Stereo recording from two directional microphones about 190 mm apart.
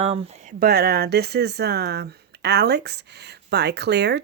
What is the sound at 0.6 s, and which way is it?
Speech, 55° right (ahead or behind).